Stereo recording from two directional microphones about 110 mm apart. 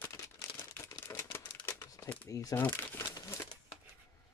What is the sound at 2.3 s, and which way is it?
Speech, 30° left (ahead or behind).